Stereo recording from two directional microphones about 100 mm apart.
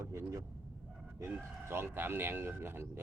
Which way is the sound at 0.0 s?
25° right (ahead or behind).